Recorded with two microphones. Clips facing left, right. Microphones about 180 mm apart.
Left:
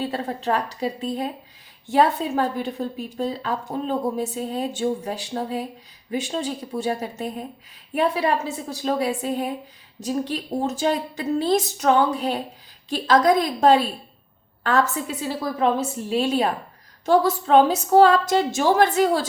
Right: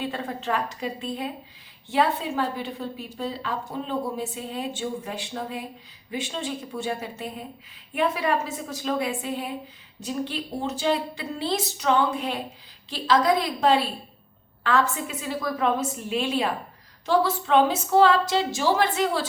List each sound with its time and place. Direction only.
0.0 s a woman's voice: 35° left (ahead or behind)